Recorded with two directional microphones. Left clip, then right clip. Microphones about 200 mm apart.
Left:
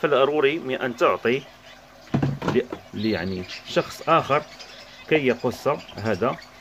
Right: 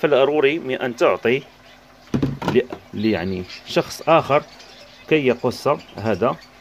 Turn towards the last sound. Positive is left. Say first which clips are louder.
# right 4 dB
turn(degrees=-20)  # may be behind; listen again after turning